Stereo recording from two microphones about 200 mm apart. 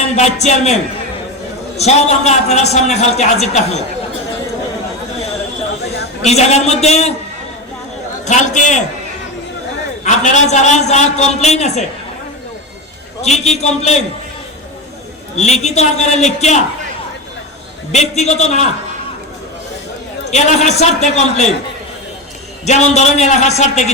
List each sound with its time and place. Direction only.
0.2 s a man's voice: 35° left (ahead or behind)
6.2 s a man's voice: 35° left (ahead or behind)
8.2 s a man's voice: 35° left (ahead or behind)
10.0 s a man's voice: 35° left (ahead or behind)
13.2 s a man's voice: 35° left (ahead or behind)
15.4 s a man's voice: 35° left (ahead or behind)
17.9 s a man's voice: 35° left (ahead or behind)
20.3 s a man's voice: 35° left (ahead or behind)
22.6 s a man's voice: 35° left (ahead or behind)